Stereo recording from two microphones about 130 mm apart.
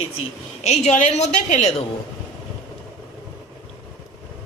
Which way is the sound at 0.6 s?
60° left (ahead or behind).